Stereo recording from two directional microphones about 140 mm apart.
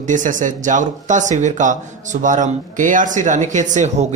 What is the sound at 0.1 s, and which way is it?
Speech, 65° right (ahead or behind).